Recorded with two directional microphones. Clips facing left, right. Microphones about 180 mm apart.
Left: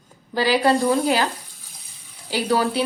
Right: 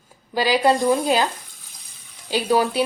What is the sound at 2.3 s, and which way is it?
Speech, 15° right (ahead or behind).